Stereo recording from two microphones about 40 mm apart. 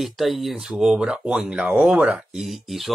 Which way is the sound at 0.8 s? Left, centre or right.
Right.